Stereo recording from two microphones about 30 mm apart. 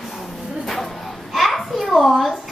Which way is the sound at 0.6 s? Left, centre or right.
Centre.